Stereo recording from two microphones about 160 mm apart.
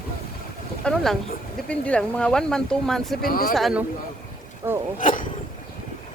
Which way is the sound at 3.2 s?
65° left (ahead or behind).